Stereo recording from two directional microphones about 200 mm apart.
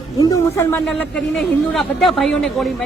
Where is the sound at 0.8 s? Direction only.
Centre (ahead or behind).